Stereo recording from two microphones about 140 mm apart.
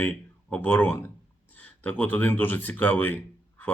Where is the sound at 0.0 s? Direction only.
10° left (ahead or behind).